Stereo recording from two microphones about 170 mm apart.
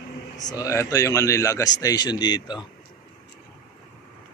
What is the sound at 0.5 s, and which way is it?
Speech, 20° left (ahead or behind).